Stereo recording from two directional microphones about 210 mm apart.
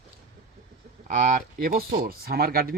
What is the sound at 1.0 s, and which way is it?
Speech, 35° right (ahead or behind).